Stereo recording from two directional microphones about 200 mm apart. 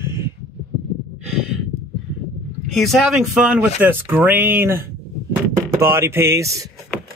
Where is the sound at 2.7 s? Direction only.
Centre (ahead or behind); by 6.7 s 15° right (ahead or behind).